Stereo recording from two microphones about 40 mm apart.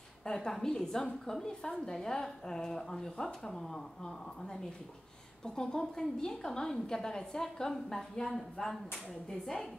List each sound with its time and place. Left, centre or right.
0.2 s a woman's voice: centre
9.3 s a woman's voice: centre